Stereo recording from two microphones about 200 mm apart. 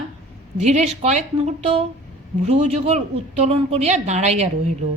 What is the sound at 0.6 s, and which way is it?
A woman's voice, 35° right (ahead or behind).